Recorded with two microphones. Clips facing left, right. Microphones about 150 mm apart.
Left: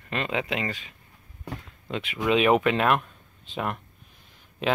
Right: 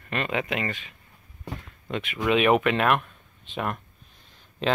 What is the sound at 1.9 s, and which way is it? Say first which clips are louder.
Speech: even; 25° left (ahead or behind).